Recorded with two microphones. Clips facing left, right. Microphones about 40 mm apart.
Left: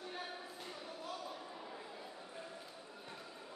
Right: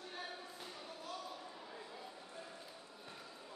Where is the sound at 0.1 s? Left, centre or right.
Centre.